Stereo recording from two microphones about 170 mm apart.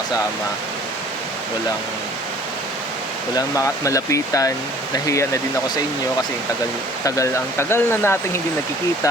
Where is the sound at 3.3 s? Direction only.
20° left (ahead or behind).